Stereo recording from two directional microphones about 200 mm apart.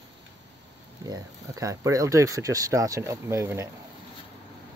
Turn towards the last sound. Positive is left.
turn(degrees=-15)  # may be behind; listen again after turning